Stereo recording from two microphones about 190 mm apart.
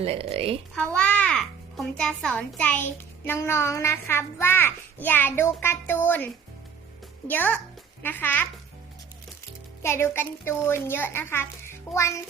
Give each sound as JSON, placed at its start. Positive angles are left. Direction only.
{"t": 0.0, "sound": "a woman's voice", "side_deg": -30}
{"t": 0.8, "sound": "a child's voice", "side_deg": 5}
{"t": 9.8, "sound": "a child's voice", "side_deg": 15}